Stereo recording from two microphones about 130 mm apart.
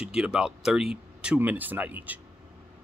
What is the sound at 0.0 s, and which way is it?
A man's voice, 5° right (ahead or behind).